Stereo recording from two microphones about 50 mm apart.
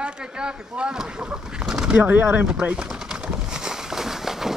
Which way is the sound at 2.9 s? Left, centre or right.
Centre.